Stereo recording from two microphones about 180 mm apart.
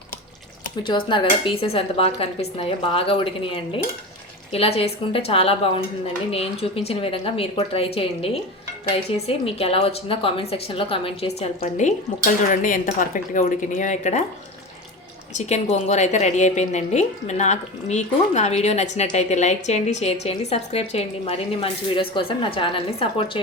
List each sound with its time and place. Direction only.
0.9 s a woman's voice: 25° left (ahead or behind); by 14.3 s 40° left (ahead or behind)
15.4 s a woman's voice: 40° left (ahead or behind)